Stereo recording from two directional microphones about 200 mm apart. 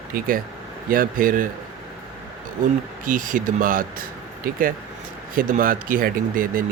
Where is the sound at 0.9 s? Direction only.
45° right (ahead or behind).